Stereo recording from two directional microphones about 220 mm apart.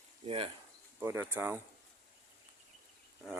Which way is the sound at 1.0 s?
10° right (ahead or behind).